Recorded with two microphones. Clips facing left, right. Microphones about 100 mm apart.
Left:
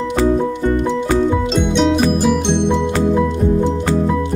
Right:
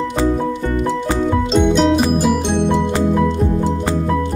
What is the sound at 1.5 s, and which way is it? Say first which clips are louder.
Music: right 2 dB; centre (ahead or behind).